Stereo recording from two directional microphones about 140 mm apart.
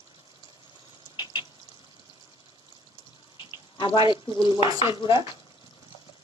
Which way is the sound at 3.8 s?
35° left (ahead or behind).